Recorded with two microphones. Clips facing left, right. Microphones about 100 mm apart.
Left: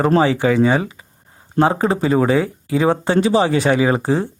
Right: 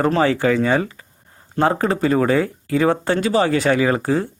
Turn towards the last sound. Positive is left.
turn(degrees=20)  # may be behind; listen again after turning